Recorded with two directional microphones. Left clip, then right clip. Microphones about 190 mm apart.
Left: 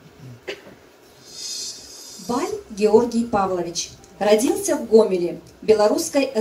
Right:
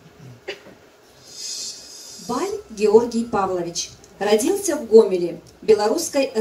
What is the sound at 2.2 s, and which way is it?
A woman's voice, 25° right (ahead or behind).